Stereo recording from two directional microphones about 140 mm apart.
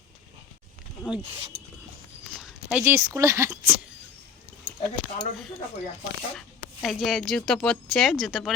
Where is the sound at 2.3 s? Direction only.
5° right (ahead or behind).